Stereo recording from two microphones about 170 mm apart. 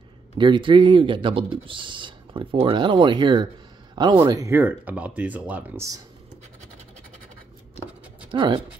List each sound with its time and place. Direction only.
0.4 s speech: 30° right (ahead or behind)
8.3 s speech: 30° right (ahead or behind)